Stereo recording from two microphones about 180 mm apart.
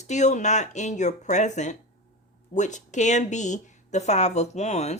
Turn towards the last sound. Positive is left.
turn(degrees=40)  # may be behind; listen again after turning